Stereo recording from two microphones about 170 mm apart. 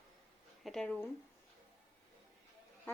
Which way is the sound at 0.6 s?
Centre (ahead or behind).